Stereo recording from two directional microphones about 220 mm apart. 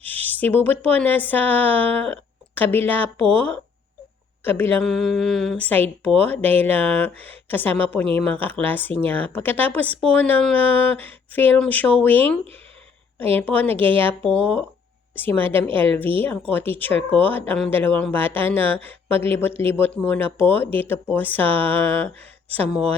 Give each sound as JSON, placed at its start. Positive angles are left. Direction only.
{"t": 0.0, "sound": "a woman's voice", "side_deg": 10}